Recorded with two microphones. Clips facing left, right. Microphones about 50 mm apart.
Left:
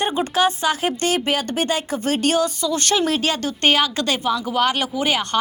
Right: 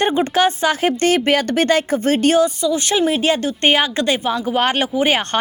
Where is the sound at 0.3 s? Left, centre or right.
Right.